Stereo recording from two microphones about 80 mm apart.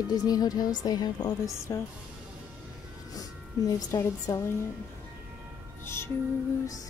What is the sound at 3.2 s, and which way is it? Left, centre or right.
Music, left.